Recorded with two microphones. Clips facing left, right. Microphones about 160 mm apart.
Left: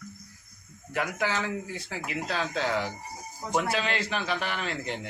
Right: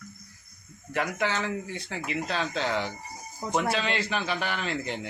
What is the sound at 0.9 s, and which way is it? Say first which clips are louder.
A man's voice: right 1 dB; centre (ahead or behind).